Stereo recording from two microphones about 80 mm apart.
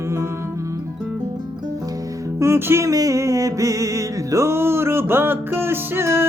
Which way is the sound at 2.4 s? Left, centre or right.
Right.